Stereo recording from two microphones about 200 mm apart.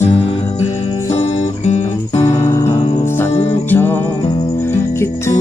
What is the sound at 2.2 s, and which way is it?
Music, 15° left (ahead or behind).